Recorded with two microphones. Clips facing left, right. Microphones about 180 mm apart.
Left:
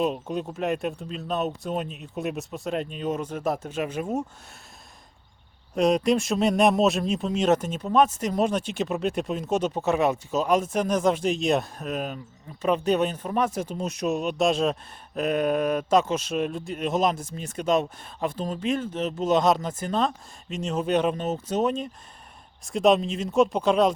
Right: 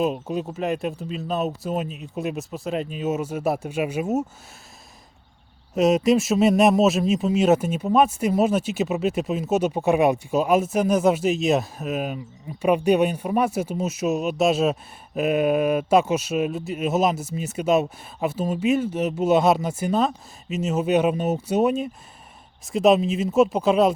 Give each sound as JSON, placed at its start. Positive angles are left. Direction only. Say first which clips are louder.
{"t": 0.0, "sound": "speech", "louder": "right 2 dB", "side_deg": 0}
{"t": 5.7, "sound": "speech", "louder": "right 3 dB", "side_deg": -5}